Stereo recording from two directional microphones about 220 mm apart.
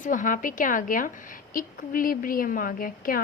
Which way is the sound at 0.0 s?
35° left (ahead or behind).